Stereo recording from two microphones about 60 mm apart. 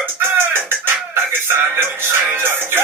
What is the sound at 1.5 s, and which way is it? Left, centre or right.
Music, right.